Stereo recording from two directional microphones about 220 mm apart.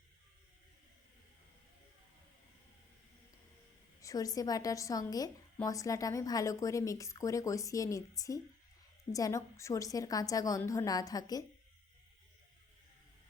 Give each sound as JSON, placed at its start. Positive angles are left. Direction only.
{"t": 4.0, "sound": "a woman's voice", "side_deg": 15}